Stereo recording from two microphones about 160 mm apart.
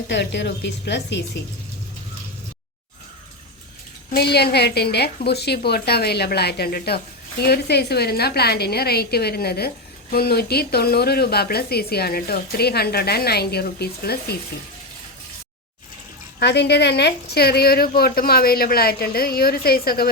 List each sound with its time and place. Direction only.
0.1 s a woman's voice: 90° left
4.1 s a woman's voice: 90° left
16.4 s a woman's voice: 90° left; by 20.1 s 70° left (ahead or behind)